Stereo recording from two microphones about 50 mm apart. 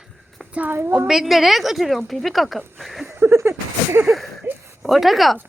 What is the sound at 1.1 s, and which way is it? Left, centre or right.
A woman's voice, centre.